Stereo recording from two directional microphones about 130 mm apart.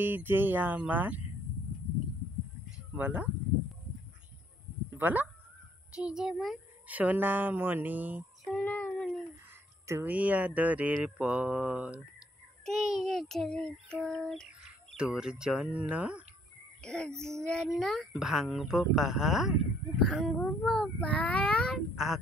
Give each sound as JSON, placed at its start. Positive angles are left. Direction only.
{"t": 0.0, "sound": "mantra", "side_deg": -15}
{"t": 3.0, "sound": "mantra", "side_deg": -15}
{"t": 4.9, "sound": "speech", "side_deg": -15}
{"t": 6.9, "sound": "mantra", "side_deg": -10}
{"t": 8.5, "sound": "child singing", "side_deg": 10}
{"t": 9.8, "sound": "speech", "side_deg": -20}
{"t": 10.1, "sound": "mantra", "side_deg": -10}
{"t": 12.6, "sound": "speech", "side_deg": 0}
{"t": 14.0, "sound": "bird", "side_deg": 5}
{"t": 15.0, "sound": "mantra", "side_deg": -5}
{"t": 16.8, "sound": "speech", "side_deg": 5}